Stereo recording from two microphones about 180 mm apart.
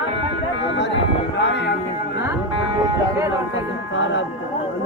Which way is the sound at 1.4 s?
75° left (ahead or behind).